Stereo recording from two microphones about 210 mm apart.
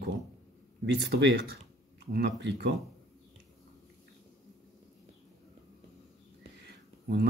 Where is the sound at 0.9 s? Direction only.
50° right (ahead or behind).